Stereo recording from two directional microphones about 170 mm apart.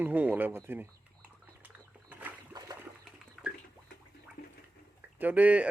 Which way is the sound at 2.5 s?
20° right (ahead or behind).